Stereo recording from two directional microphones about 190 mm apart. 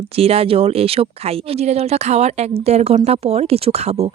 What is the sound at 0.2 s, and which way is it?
Speech, 30° right (ahead or behind).